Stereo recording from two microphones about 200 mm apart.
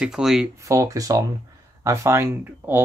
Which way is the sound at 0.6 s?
15° right (ahead or behind).